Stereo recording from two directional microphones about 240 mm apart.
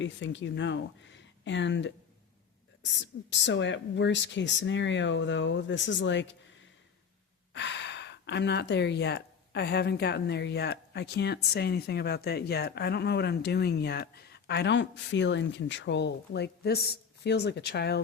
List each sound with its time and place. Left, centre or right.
0.0 s speech: left
3.2 s speech: left
7.5 s speech: left